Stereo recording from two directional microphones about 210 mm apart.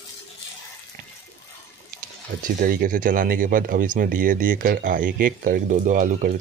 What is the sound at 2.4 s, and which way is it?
Speech, 45° right (ahead or behind).